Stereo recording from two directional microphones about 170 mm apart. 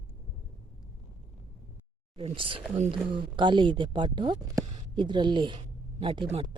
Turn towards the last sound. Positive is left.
turn(degrees=-30)  # may be behind; listen again after turning